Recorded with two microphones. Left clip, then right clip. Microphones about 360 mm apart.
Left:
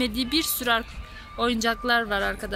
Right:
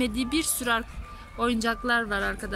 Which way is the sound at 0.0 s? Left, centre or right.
Centre.